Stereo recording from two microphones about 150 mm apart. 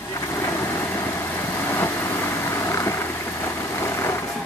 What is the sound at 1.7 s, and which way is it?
Vehicle, 15° left (ahead or behind).